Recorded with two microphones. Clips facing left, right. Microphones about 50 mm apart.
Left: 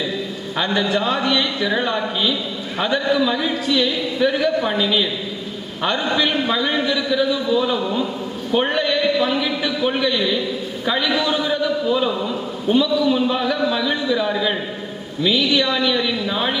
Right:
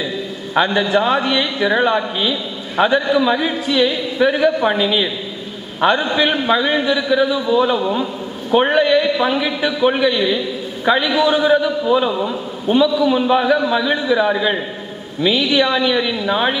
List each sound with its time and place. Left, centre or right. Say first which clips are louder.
0.7 s a man's voice: right 4 dB; right